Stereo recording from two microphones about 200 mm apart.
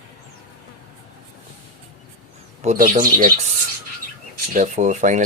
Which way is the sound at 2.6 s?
40° right (ahead or behind).